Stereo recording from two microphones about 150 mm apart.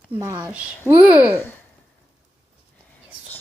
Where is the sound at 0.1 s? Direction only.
20° right (ahead or behind).